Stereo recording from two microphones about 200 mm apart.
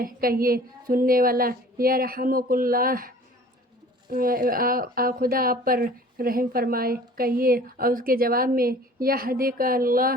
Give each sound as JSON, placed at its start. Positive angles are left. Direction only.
{"t": 0.0, "sound": "a woman's voice", "side_deg": -45}
{"t": 4.1, "sound": "a woman's voice", "side_deg": -45}